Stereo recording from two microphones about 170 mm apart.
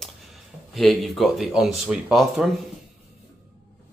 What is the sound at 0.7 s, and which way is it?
Speech, centre (ahead or behind).